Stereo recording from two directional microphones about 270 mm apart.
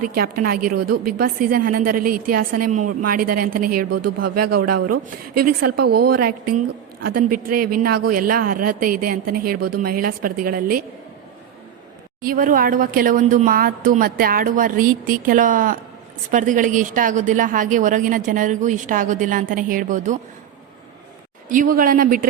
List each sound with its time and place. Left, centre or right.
0.0 s speech: right
3.9 s speech: right
5.3 s speech: right
9.6 s speech: right
9.8 s speech: right
12.2 s speech: right
21.5 s speech: right